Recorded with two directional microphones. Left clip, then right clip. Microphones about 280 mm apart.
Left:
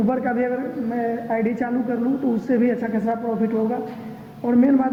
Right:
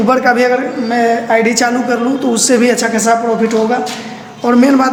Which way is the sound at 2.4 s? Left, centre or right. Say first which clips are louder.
Right 11 dB; centre.